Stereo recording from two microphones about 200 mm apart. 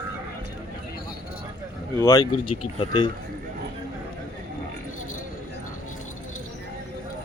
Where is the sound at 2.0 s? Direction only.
15° left (ahead or behind).